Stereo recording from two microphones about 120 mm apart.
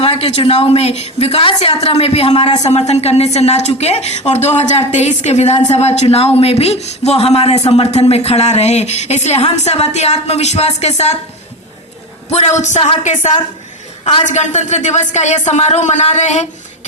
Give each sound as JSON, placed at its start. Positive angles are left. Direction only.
{"t": 0.0, "sound": "speech", "side_deg": 55}
{"t": 12.3, "sound": "speech", "side_deg": 70}
{"t": 14.3, "sound": "speech", "side_deg": 80}